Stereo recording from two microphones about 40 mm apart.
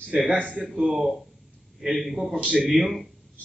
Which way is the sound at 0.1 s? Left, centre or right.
Right.